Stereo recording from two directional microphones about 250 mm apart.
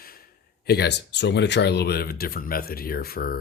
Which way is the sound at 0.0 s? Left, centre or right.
Left.